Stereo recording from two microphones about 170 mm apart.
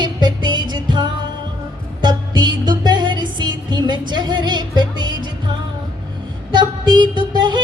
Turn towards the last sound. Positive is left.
turn(degrees=-25)  # may be behind; listen again after turning